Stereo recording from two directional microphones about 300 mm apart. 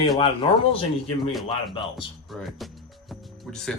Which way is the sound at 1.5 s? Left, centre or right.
Centre.